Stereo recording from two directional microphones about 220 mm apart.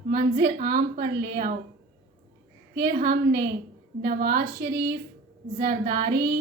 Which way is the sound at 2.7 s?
45° right (ahead or behind).